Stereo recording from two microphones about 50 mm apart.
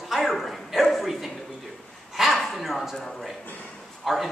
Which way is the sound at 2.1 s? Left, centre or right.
Centre.